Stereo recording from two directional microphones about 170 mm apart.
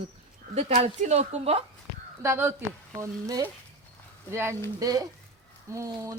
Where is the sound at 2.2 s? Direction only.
15° right (ahead or behind).